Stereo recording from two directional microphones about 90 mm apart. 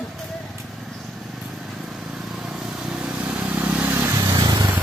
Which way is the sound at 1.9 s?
5° right (ahead or behind).